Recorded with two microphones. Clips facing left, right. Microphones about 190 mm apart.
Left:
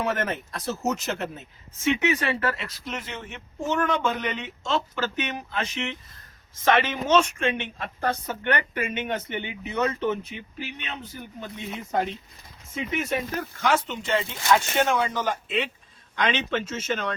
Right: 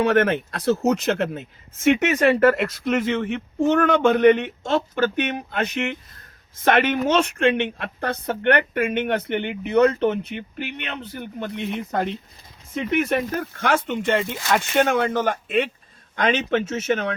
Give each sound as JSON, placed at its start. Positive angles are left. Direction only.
{"t": 0.0, "sound": "a woman's voice", "side_deg": -70}
{"t": 1.8, "sound": "a woman's voice", "side_deg": -50}